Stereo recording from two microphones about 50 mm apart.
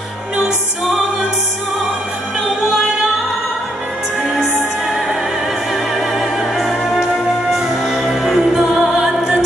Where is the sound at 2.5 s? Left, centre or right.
Centre.